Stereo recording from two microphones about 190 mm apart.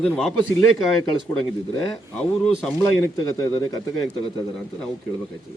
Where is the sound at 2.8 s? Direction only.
15° left (ahead or behind).